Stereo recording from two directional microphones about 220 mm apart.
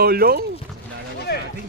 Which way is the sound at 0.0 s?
45° right (ahead or behind).